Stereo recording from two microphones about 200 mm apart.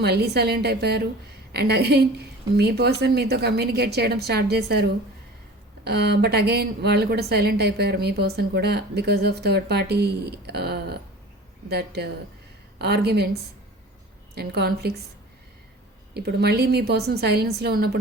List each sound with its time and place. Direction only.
0.0 s a woman's voice: 55° right (ahead or behind)
14.3 s a woman's voice: 55° right (ahead or behind)
16.1 s a woman's voice: 55° right (ahead or behind)